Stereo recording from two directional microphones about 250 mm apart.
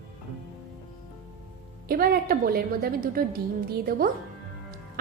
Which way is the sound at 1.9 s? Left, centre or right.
Right.